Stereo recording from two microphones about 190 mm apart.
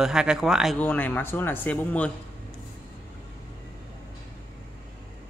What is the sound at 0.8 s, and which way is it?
Speech, 10° left (ahead or behind).